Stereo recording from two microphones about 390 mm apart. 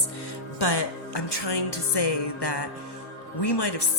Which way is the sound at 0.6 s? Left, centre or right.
Left.